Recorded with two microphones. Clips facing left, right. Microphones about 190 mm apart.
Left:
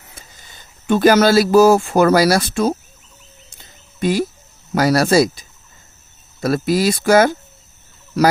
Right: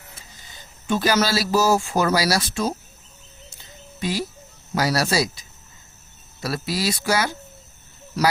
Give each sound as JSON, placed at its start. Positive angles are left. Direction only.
{"t": 0.9, "sound": "speech", "side_deg": 55}
{"t": 4.0, "sound": "speech", "side_deg": 50}